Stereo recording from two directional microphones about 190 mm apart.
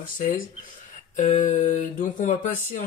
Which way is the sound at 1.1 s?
40° left (ahead or behind).